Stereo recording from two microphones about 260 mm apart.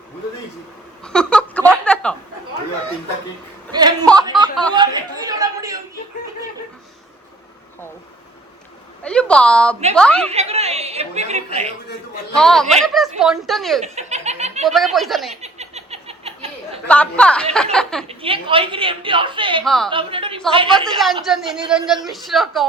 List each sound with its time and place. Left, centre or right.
1.0 s a sound: centre
3.7 s speech: centre
9.0 s a woman's voice: centre
10.3 s a woman's voice: right
12.3 s a woman's voice: centre
13.8 s snicker: right
14.6 s a woman's voice: centre
15.4 s a sound: right
16.9 s a woman's voice: centre
18.1 s a woman's voice: right
19.6 s a woman's voice: centre
19.9 s a woman's voice: centre
21.0 s a woman's voice: centre